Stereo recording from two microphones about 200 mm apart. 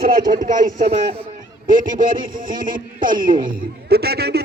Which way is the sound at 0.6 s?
30° right (ahead or behind).